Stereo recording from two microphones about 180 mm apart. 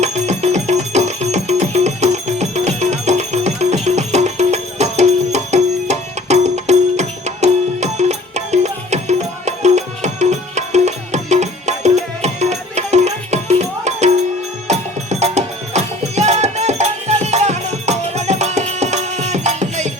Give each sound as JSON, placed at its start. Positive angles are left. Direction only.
{"t": 0.0, "sound": "music", "side_deg": -40}